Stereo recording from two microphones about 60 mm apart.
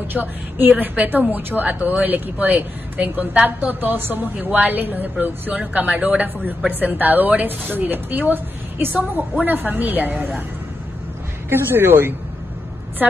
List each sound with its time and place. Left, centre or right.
0.1 s a woman's voice: right
11.4 s speech: right